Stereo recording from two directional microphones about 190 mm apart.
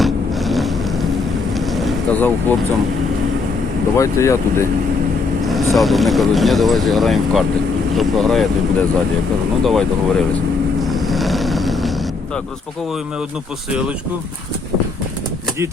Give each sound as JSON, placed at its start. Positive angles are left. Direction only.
{"t": 0.0, "sound": "a sound", "side_deg": 0}
{"t": 1.5, "sound": "vehicle", "side_deg": 0}
{"t": 3.9, "sound": "speech", "side_deg": 15}
{"t": 5.5, "sound": "speech", "side_deg": 0}
{"t": 9.6, "sound": "speech", "side_deg": 0}
{"t": 10.8, "sound": "vehicle", "side_deg": 0}